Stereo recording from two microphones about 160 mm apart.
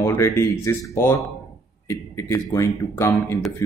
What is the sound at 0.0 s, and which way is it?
Speech, 15° left (ahead or behind).